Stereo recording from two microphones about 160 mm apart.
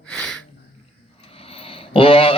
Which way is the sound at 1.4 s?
35° left (ahead or behind).